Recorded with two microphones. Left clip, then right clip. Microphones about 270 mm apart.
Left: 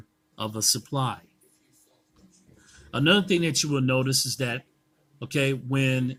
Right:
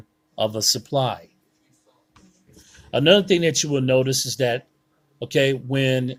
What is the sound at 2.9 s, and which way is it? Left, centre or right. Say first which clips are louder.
Speech: right 6 dB; centre.